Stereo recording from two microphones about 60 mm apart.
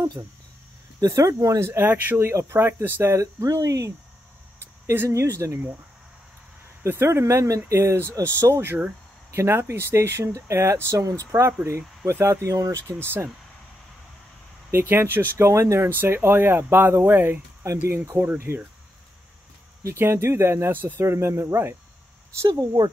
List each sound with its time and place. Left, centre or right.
1.0 s speech: right
1.7 s speech: right
4.8 s speech: right
7.0 s speech: right
7.7 s speech: right
11.3 s speech: right
12.1 s speech: right
13.0 s speech: right
14.7 s speech: right
15.9 s speech: right
17.6 s speech: right
18.2 s speech: right
20.0 s speech: right
22.5 s speech: right